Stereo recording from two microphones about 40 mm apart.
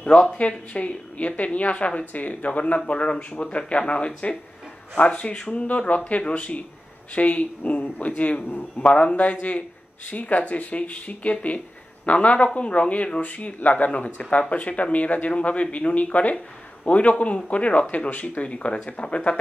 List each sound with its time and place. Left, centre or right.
0.4 s speech: left